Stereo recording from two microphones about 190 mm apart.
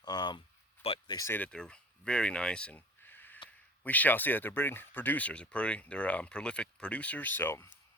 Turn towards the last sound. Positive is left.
turn(degrees=10)  # may be behind; listen again after turning